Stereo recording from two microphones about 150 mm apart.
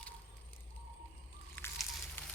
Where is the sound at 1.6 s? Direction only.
15° left (ahead or behind).